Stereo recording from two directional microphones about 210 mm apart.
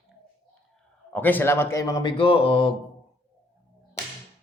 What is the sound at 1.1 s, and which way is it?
Speech, 10° left (ahead or behind).